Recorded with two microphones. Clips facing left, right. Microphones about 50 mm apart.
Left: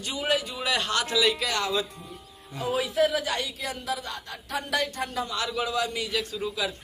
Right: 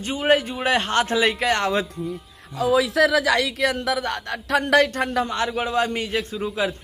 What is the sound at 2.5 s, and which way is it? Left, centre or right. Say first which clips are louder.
A man's voice: right 8 dB; right.